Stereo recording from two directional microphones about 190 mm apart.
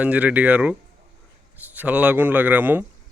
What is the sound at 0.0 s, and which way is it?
A man's voice, 5° right (ahead or behind).